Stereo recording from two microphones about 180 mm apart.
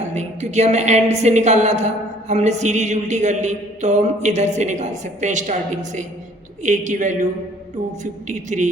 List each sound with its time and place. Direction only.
0.0 s a woman's voice: 40° right (ahead or behind)